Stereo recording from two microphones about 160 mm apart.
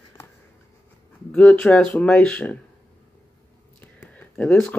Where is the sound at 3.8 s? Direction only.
10° left (ahead or behind).